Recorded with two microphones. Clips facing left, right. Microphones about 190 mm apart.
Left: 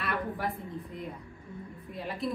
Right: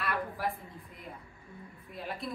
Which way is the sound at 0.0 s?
Centre (ahead or behind).